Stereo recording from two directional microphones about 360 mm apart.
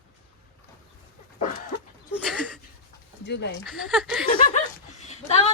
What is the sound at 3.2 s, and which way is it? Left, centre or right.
Speech, left.